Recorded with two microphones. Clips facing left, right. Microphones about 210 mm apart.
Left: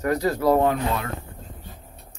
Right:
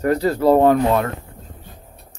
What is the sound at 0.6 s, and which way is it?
Speech, 50° right (ahead or behind).